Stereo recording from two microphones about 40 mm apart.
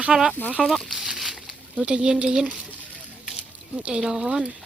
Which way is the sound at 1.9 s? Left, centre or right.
Right.